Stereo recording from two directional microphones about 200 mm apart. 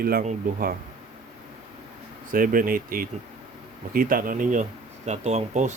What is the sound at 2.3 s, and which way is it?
Speech, 45° right (ahead or behind).